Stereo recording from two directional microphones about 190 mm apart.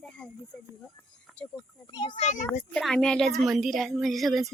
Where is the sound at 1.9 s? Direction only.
25° left (ahead or behind).